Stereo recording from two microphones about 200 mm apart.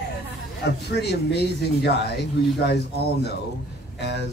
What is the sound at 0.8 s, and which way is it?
Speech, 55° left (ahead or behind).